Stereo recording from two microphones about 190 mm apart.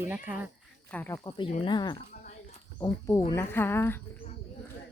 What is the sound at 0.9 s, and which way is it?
Speech, 10° left (ahead or behind).